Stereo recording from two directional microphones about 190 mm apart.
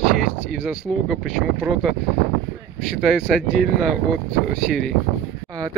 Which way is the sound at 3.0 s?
Centre (ahead or behind).